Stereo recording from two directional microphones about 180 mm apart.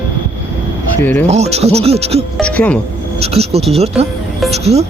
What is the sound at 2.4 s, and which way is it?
Speech, 5° left (ahead or behind).